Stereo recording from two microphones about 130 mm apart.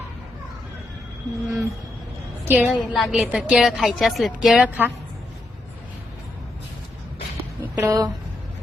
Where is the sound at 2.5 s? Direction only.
10° right (ahead or behind).